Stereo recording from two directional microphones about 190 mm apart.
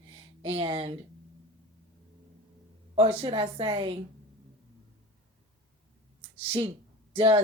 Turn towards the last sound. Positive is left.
turn(degrees=-30)  # may be behind; listen again after turning